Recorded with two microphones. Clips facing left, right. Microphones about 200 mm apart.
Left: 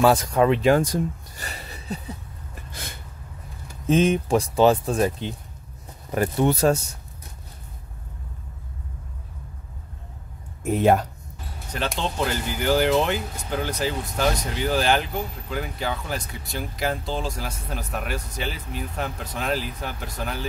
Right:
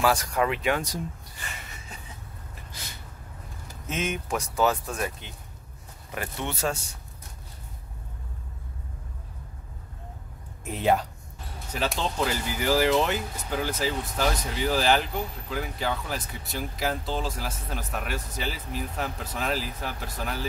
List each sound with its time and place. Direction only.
0.0 s speech: 25° left (ahead or behind)
0.7 s speech: 45° left (ahead or behind)
2.7 s a sound: 55° left (ahead or behind)
3.8 s speech: 35° left (ahead or behind)
10.6 s speech: 50° left (ahead or behind)
11.7 s speech: 5° right (ahead or behind)